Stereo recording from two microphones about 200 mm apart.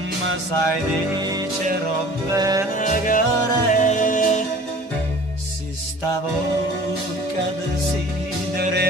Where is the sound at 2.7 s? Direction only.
40° left (ahead or behind).